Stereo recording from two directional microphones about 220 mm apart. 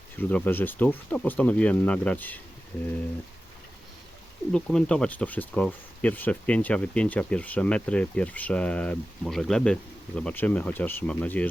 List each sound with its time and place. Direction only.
0.2 s speech: 10° left (ahead or behind)
4.5 s speech: 5° left (ahead or behind)